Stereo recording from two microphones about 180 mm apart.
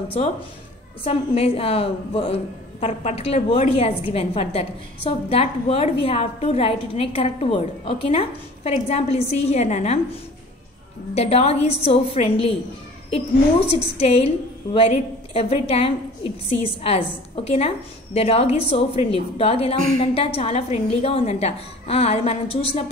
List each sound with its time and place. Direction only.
1.0 s a woman's voice: 30° left (ahead or behind)
11.1 s a woman's voice: 35° left (ahead or behind)